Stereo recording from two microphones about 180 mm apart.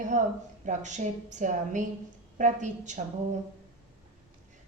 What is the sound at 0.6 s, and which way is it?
A woman's voice, 45° right (ahead or behind).